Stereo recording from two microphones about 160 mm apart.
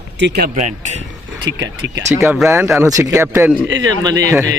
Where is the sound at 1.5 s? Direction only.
20° right (ahead or behind).